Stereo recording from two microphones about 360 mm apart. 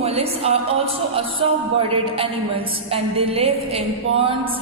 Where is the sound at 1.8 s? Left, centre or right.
Centre.